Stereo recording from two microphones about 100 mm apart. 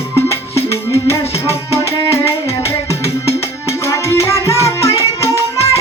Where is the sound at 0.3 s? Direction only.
30° left (ahead or behind).